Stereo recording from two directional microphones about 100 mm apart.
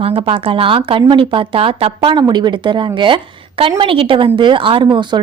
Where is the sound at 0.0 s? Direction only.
70° right (ahead or behind).